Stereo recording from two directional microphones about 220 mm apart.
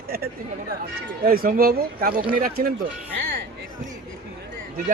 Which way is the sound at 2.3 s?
40° right (ahead or behind).